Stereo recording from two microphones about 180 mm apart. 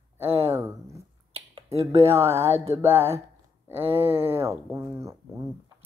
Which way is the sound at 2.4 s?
35° right (ahead or behind).